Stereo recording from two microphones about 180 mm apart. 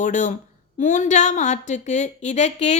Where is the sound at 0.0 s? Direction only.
45° left (ahead or behind).